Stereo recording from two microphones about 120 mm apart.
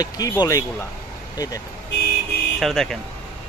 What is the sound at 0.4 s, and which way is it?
Speech, 25° left (ahead or behind).